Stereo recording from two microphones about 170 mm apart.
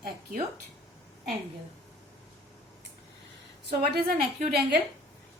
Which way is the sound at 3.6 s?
70° right (ahead or behind).